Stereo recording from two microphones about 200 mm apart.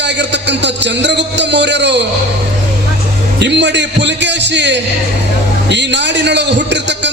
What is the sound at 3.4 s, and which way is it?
A man's voice, 60° right (ahead or behind).